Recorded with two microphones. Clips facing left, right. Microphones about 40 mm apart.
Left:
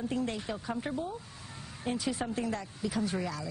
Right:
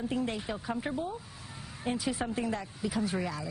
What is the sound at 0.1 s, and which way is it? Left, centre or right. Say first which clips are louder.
Speech: right 1 dB; centre.